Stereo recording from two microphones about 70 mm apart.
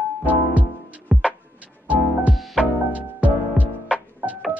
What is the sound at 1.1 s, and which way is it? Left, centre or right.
Music, centre.